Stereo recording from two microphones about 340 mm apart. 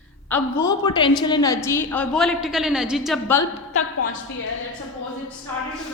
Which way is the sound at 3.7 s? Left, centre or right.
Left.